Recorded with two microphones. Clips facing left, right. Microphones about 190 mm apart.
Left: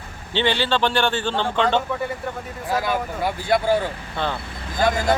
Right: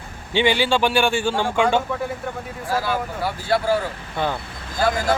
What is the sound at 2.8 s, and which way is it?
Speech, 20° left (ahead or behind).